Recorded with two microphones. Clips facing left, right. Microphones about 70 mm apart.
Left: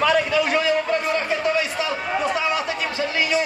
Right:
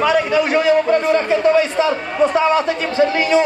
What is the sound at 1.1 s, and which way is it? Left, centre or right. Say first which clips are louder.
Speech: right 8 dB; right.